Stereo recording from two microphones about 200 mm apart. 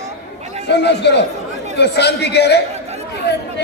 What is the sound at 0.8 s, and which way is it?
Speech, 60° left (ahead or behind).